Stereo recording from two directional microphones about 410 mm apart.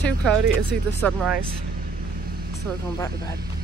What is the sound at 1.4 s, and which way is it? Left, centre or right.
Vehicle, right.